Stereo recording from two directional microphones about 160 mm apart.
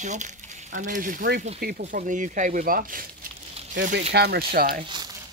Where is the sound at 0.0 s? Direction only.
50° right (ahead or behind).